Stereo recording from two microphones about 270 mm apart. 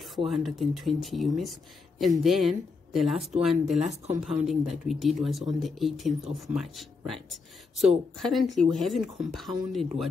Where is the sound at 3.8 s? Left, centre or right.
Right.